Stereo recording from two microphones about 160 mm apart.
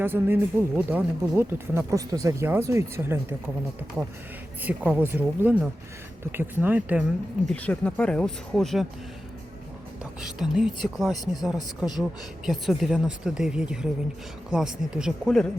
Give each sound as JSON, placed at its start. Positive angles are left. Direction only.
{"t": 0.0, "sound": "speech", "side_deg": -10}
{"t": 4.6, "sound": "speech", "side_deg": -10}
{"t": 7.4, "sound": "speech", "side_deg": 10}
{"t": 10.0, "sound": "speech", "side_deg": -5}